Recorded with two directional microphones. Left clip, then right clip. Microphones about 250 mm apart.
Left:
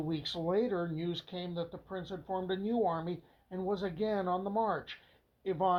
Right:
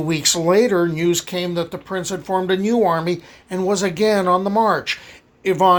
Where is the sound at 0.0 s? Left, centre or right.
Right.